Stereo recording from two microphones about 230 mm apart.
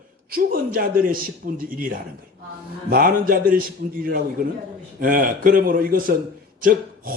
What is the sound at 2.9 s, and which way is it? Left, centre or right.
A man's voice, right.